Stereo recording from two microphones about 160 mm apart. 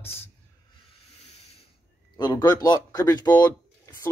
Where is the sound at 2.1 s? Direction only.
25° left (ahead or behind).